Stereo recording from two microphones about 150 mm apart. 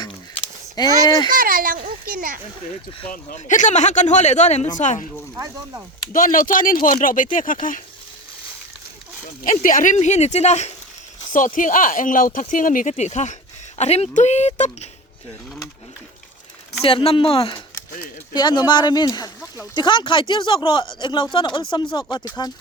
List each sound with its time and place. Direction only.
1.0 s speech: 25° left (ahead or behind)
1.3 s a child's voice: 70° right (ahead or behind)
3.1 s speech: 60° left (ahead or behind)
6.1 s speech: 65° left (ahead or behind)
9.4 s speech: 65° left (ahead or behind); by 10.8 s 50° left (ahead or behind)
11.3 s speech: 60° left (ahead or behind)
16.8 s speech: 40° left (ahead or behind)
18.3 s speech: 30° left (ahead or behind)